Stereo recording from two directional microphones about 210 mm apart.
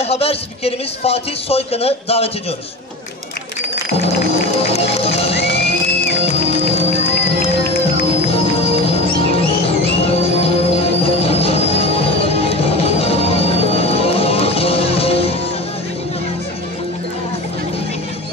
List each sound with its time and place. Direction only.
0.0 s speech: 30° left (ahead or behind)
4.0 s music: 30° left (ahead or behind)
8.3 s music: 30° left (ahead or behind)